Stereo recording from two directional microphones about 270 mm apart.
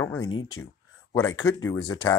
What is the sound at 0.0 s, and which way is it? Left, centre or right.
Speech, centre.